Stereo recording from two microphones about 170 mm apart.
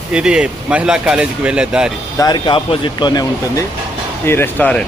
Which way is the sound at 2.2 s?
25° left (ahead or behind).